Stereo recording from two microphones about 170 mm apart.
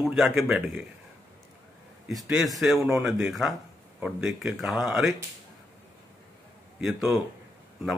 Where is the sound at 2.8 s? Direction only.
15° right (ahead or behind).